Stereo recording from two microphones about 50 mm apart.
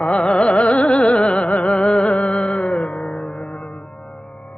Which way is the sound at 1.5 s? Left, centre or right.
Left.